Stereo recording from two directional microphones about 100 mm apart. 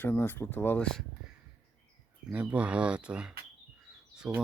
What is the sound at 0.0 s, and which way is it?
Speech, 20° left (ahead or behind).